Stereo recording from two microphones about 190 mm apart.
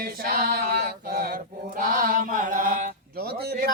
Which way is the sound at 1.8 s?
45° right (ahead or behind).